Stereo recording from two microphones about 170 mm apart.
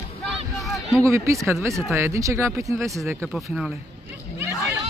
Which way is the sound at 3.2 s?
Centre (ahead or behind).